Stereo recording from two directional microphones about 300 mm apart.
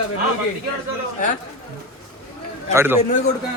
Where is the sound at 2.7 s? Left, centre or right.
Centre.